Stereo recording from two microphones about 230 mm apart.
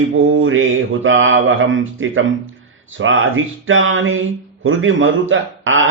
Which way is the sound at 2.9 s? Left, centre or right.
Right.